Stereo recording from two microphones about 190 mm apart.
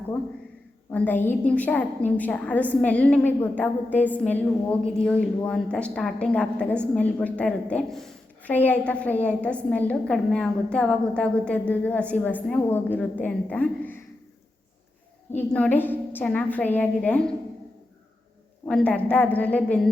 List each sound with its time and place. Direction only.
0.9 s a woman's voice: 10° left (ahead or behind)
15.4 s a woman's voice: 10° left (ahead or behind)
18.6 s a woman's voice: 5° left (ahead or behind)